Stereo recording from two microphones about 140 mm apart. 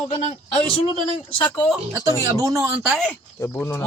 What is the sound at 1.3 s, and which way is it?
Speech, 35° left (ahead or behind).